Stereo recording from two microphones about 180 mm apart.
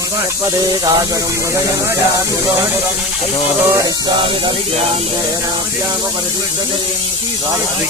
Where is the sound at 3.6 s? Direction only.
15° right (ahead or behind).